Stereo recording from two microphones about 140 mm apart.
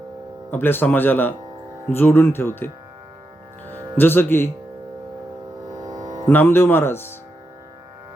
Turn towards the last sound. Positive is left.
turn(degrees=15)  # may be behind; listen again after turning